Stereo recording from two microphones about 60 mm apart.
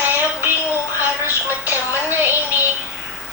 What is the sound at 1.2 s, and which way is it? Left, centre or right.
Music, right.